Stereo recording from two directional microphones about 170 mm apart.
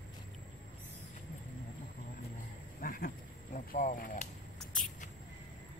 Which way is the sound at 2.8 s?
55° left (ahead or behind).